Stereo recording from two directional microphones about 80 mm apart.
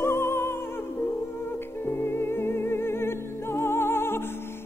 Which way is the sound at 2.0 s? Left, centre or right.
Left.